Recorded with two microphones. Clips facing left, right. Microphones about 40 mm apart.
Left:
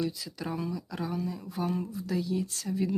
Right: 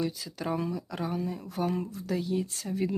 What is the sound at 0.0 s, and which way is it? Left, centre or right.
Speech, right.